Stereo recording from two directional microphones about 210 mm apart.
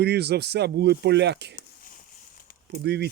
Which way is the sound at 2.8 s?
50° right (ahead or behind).